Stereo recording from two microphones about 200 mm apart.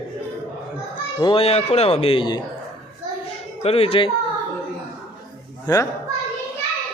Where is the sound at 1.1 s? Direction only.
25° left (ahead or behind).